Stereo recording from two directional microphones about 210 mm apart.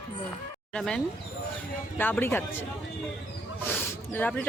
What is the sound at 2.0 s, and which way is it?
Speech, 10° left (ahead or behind).